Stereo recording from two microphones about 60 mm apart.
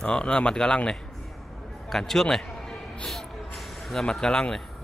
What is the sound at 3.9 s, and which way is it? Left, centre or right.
Speech, centre.